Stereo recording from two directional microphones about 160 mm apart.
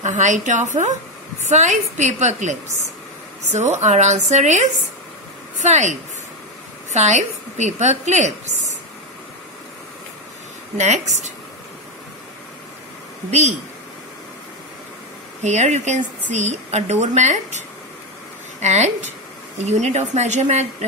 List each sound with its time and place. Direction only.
0.0 s speech: 50° right (ahead or behind)
10.8 s speech: 45° right (ahead or behind)
13.3 s speech: 45° right (ahead or behind)
15.4 s speech: 45° right (ahead or behind)
18.6 s a woman's voice: 45° right (ahead or behind)